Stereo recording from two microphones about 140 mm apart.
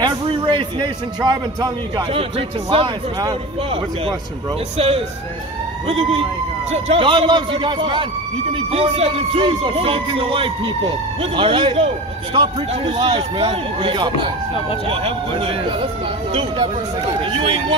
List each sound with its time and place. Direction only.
0.0 s music: 35° right (ahead or behind)
4.7 s speech: 45° right (ahead or behind)
6.7 s music: 45° right (ahead or behind)
17.2 s music: 40° right (ahead or behind)